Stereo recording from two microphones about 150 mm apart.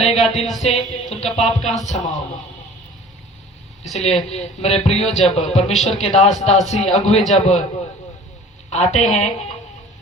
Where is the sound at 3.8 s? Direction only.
Centre (ahead or behind).